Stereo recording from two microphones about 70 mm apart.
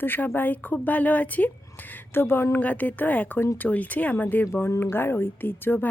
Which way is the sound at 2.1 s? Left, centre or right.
Left.